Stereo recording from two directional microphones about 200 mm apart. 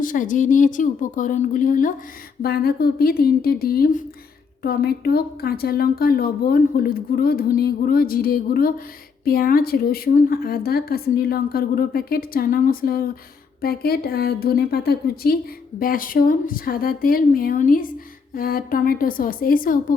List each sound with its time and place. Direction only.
0.0 s a woman's voice: 40° left (ahead or behind)